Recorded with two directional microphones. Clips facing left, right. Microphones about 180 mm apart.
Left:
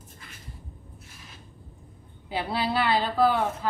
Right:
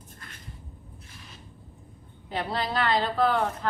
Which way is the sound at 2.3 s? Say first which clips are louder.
Left 2 dB; 10° left (ahead or behind).